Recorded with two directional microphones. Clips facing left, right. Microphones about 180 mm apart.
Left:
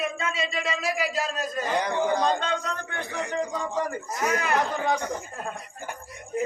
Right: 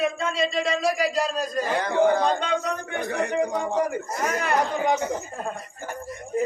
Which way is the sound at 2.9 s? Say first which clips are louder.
Right 5 dB; 60° right (ahead or behind).